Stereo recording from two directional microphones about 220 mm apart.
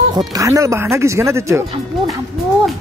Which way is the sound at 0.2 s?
15° right (ahead or behind).